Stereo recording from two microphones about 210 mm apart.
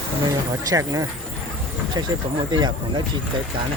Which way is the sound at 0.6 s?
15° right (ahead or behind).